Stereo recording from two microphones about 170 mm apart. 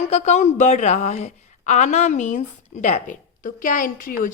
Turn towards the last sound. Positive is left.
turn(degrees=55)  # may be behind; listen again after turning